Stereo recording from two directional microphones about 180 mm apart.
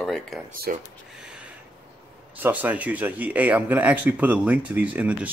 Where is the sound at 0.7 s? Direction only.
50° right (ahead or behind).